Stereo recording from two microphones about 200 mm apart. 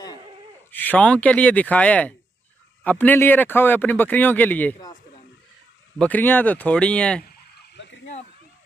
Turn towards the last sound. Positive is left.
turn(degrees=65)  # may be behind; listen again after turning